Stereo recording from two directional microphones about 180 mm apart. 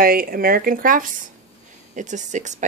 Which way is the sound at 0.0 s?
55° right (ahead or behind).